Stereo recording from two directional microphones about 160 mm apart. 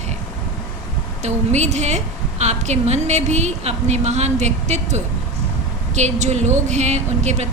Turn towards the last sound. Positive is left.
turn(degrees=-45)  # may be behind; listen again after turning